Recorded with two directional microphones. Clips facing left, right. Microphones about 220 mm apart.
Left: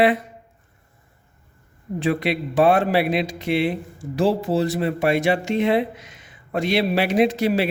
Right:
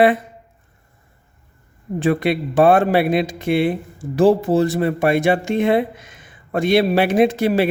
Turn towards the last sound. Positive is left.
turn(degrees=-50)  # may be behind; listen again after turning